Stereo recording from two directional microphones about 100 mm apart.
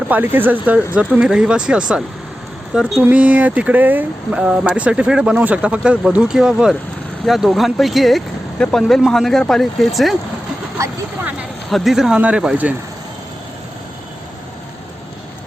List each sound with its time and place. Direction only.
0.1 s speech: 20° right (ahead or behind); by 10.2 s centre (ahead or behind)
10.8 s speech: 30° right (ahead or behind)
11.7 s speech: centre (ahead or behind)